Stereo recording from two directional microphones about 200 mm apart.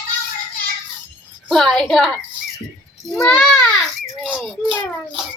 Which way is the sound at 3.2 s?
10° left (ahead or behind).